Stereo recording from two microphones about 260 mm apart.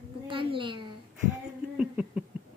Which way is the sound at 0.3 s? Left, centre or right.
Centre.